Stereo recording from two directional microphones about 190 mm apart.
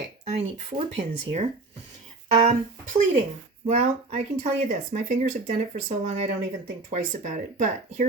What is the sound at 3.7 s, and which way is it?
Speech, 35° right (ahead or behind).